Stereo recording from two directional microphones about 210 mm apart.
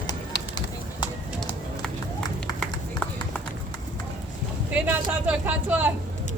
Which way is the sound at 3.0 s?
5° left (ahead or behind).